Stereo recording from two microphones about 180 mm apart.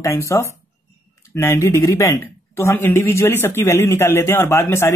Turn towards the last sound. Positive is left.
turn(degrees=15)  # may be behind; listen again after turning